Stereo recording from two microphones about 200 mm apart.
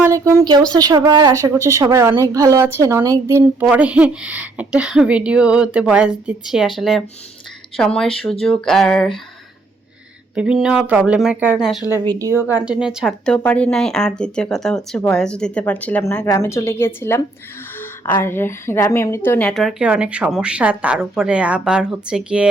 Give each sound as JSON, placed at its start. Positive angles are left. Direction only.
{"t": 0.0, "sound": "a woman's voice", "side_deg": -15}
{"t": 10.3, "sound": "a woman's voice", "side_deg": -5}
{"t": 12.0, "sound": "a woman's voice", "side_deg": -15}